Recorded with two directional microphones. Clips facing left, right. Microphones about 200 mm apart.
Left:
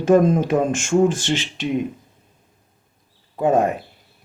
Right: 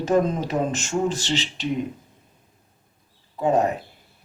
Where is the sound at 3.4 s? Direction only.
50° left (ahead or behind).